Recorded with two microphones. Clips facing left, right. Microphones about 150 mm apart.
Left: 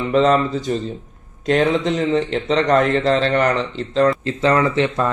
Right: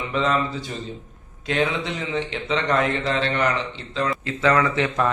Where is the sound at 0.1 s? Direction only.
40° left (ahead or behind).